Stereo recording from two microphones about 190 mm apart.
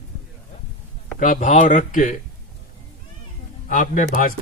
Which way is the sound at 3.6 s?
45° left (ahead or behind).